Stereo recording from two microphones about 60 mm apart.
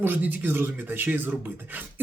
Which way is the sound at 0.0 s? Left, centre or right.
Right.